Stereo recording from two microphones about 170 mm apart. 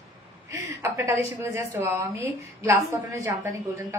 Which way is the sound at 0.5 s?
15° right (ahead or behind).